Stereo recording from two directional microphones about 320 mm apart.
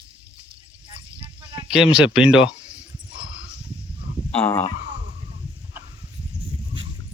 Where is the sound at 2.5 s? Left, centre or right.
Centre.